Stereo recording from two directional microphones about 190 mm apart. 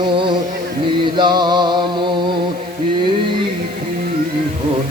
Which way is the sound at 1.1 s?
25° right (ahead or behind).